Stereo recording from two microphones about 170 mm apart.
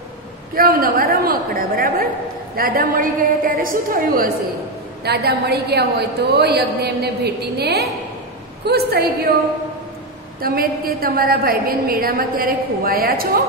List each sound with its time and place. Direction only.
0.6 s a woman's voice: 60° right (ahead or behind)
5.0 s a woman's voice: 70° right (ahead or behind)
10.4 s a woman's voice: 60° right (ahead or behind)